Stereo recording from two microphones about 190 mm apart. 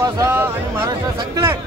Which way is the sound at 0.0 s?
15° right (ahead or behind).